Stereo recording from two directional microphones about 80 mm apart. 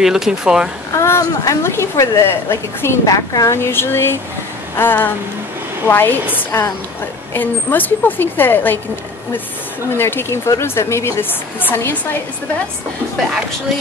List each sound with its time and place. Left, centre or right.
0.0 s speech: centre
0.9 s a woman's voice: left
3.1 s a woman's voice: left
7.3 s a woman's voice: left
9.9 s a woman's voice: left